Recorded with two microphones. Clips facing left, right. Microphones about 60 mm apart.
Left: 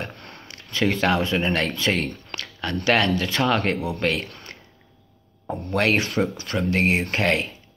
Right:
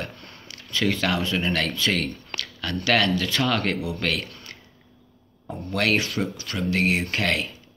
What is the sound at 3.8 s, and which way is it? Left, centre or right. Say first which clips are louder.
Speech: left 2 dB; left.